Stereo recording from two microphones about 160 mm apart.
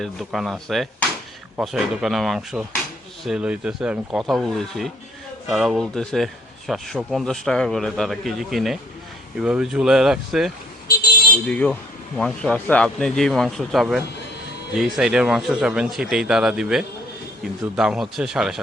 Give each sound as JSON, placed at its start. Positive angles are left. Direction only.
{"t": 0.0, "sound": "speech", "side_deg": 0}
{"t": 10.9, "sound": "vehicle", "side_deg": 65}
{"t": 11.4, "sound": "speech", "side_deg": 5}